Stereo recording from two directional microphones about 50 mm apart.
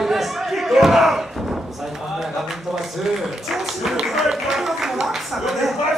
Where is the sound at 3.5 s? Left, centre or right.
Centre.